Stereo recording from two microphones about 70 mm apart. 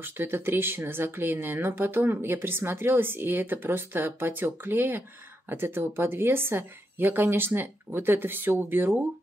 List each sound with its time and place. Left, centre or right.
0.0 s speech: right